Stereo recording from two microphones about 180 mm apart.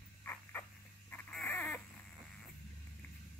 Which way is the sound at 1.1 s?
5° left (ahead or behind).